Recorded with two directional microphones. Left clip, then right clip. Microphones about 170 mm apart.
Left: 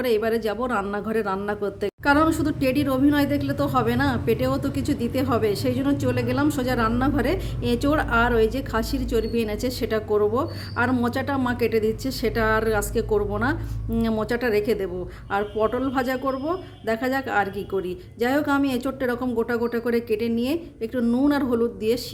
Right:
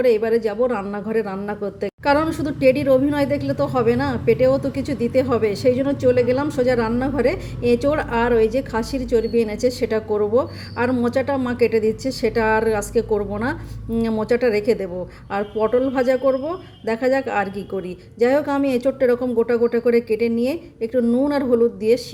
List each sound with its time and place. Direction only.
0.0 s speech: 5° right (ahead or behind)